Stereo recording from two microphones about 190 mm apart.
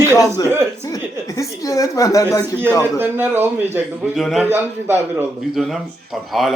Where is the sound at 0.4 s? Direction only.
15° right (ahead or behind).